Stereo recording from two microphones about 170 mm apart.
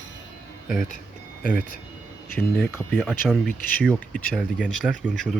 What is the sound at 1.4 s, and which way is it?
Speech, 60° left (ahead or behind).